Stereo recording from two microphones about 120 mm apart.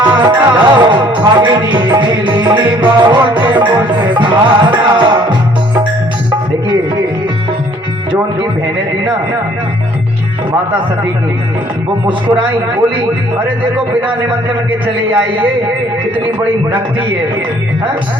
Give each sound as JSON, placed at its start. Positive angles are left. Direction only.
{"t": 0.2, "sound": "music", "side_deg": -40}
{"t": 12.0, "sound": "speech", "side_deg": -40}